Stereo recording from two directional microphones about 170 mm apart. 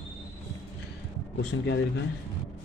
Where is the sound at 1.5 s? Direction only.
90° left.